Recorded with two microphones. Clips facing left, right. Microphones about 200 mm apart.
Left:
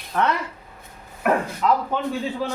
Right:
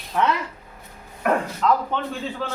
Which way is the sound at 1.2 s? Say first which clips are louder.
Even; 5° left (ahead or behind).